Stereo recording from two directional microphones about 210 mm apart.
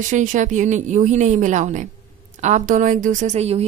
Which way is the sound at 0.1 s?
35° right (ahead or behind).